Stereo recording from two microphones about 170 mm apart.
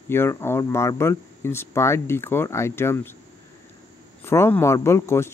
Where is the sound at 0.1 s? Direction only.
15° left (ahead or behind).